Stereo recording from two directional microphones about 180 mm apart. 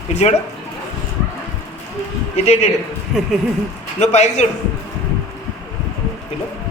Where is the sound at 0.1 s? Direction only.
35° left (ahead or behind).